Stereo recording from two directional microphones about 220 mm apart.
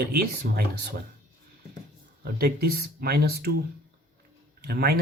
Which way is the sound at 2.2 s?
45° right (ahead or behind).